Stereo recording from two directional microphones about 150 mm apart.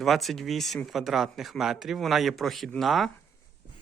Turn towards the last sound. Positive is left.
turn(degrees=0)  # may be behind; listen again after turning